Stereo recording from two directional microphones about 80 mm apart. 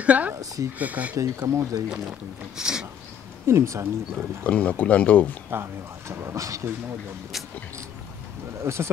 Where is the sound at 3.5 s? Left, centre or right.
Right.